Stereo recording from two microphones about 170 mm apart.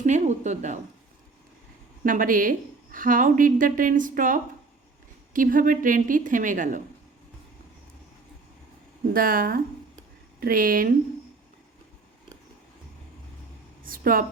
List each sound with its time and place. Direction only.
0.0 s a woman's voice: 45° right (ahead or behind)
2.0 s a woman's voice: 55° right (ahead or behind)
9.1 s speech: 55° right (ahead or behind)
13.8 s a sound: 55° right (ahead or behind)